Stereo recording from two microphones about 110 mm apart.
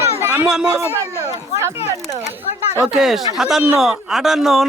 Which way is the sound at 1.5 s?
25° right (ahead or behind).